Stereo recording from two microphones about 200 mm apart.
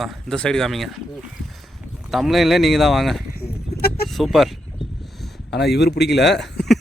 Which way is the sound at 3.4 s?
50° left (ahead or behind).